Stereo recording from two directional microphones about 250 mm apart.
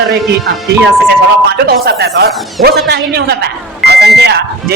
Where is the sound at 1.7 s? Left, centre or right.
Right.